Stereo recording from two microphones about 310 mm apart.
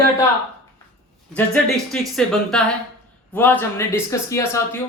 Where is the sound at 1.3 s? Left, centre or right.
Centre.